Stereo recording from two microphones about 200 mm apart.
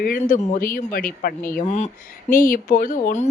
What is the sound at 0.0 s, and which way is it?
Speech, 45° left (ahead or behind).